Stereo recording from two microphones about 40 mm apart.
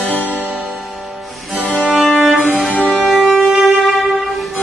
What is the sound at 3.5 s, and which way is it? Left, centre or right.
Music, centre.